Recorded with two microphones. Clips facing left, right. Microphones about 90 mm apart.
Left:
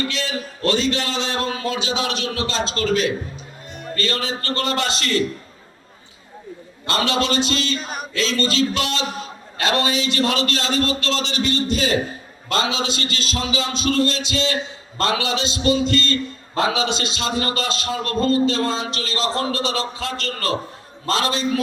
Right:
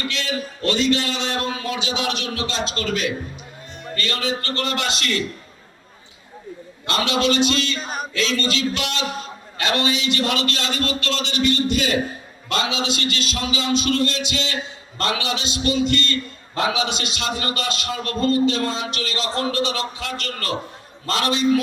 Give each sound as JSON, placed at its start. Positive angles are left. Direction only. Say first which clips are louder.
{"t": 0.1, "sound": "a man's voice", "louder": "even", "side_deg": 30}
{"t": 6.8, "sound": "a man's voice", "louder": "even", "side_deg": 30}